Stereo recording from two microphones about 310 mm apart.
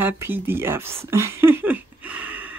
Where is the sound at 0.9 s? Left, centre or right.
Centre.